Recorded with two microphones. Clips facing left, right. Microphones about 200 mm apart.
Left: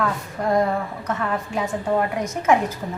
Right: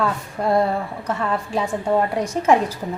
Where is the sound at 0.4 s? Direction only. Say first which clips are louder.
Right 2 dB; 30° right (ahead or behind).